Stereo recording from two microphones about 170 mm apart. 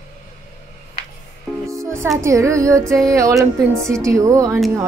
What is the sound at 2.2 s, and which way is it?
Speech, 15° right (ahead or behind).